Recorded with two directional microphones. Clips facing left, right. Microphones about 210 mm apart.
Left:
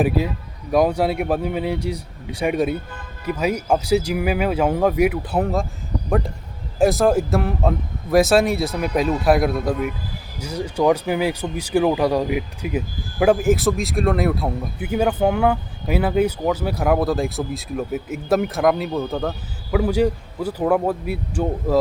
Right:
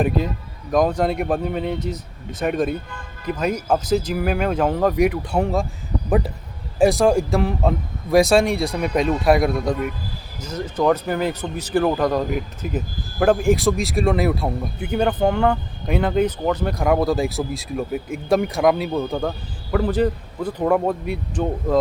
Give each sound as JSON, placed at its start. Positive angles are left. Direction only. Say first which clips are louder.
{"t": 0.7, "sound": "speech", "louder": "left 1 dB", "side_deg": 10}